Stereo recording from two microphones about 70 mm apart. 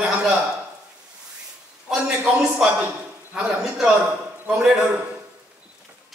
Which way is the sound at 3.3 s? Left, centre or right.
Centre.